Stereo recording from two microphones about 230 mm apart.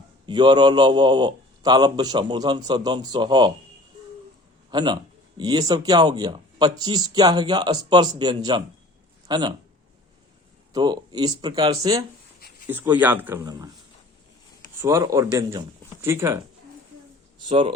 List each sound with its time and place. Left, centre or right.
0.3 s a man's voice: centre
4.7 s a man's voice: centre
10.7 s speech: centre
14.8 s speech: centre
17.4 s speech: right